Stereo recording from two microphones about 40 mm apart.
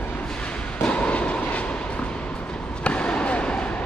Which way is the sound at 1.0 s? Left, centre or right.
Left.